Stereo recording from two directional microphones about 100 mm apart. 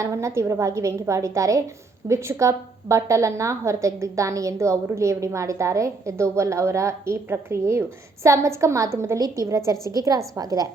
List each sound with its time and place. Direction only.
0.0 s a woman's voice: 30° right (ahead or behind)